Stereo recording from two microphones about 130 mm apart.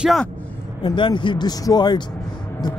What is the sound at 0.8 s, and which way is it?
Speech, 35° left (ahead or behind).